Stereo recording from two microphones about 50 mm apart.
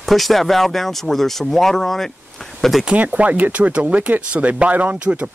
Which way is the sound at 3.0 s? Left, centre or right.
Right.